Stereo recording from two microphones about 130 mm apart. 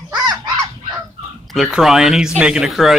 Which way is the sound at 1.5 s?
Centre (ahead or behind).